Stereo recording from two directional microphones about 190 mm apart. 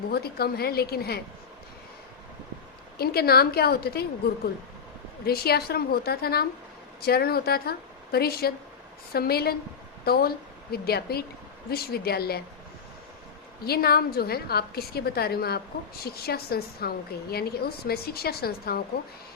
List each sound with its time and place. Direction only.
0.1 s a woman's voice: 55° left (ahead or behind)
3.0 s a woman's voice: 55° left (ahead or behind)
5.2 s a woman's voice: 55° left (ahead or behind)
13.7 s a woman's voice: 55° left (ahead or behind)